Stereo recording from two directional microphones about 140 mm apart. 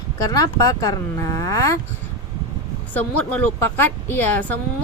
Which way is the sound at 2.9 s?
10° left (ahead or behind).